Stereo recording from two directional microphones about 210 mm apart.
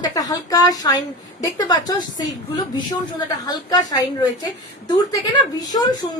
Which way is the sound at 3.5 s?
20° left (ahead or behind).